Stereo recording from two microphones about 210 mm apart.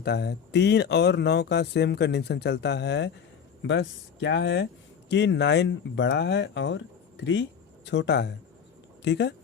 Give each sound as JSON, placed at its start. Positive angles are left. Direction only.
{"t": 0.0, "sound": "speech", "side_deg": 50}
{"t": 7.9, "sound": "speech", "side_deg": 55}